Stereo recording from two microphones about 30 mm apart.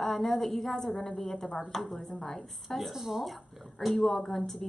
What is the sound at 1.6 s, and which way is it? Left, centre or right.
A woman's voice, centre.